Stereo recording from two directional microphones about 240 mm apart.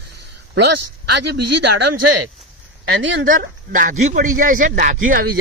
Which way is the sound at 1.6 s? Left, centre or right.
Right.